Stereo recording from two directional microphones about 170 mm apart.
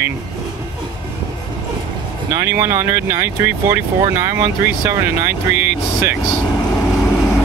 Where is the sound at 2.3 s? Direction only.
15° right (ahead or behind).